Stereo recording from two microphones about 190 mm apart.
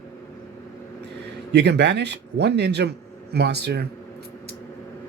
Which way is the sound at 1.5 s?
65° right (ahead or behind).